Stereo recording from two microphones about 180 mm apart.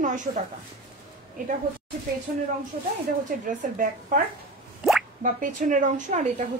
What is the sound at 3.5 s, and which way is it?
Speech, 45° right (ahead or behind).